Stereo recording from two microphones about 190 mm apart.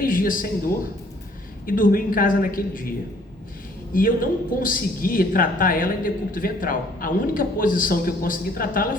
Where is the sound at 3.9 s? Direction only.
45° left (ahead or behind).